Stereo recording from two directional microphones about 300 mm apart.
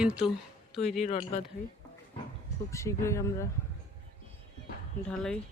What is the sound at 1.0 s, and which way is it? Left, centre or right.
Speech, left.